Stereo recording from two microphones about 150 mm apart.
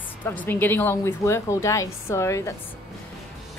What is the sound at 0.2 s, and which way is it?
A woman's voice, 10° left (ahead or behind).